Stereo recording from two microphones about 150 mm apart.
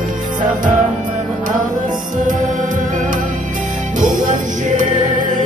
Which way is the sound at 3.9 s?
60° right (ahead or behind).